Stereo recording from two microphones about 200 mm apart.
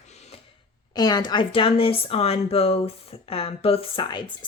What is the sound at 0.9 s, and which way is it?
A woman's voice, 20° left (ahead or behind).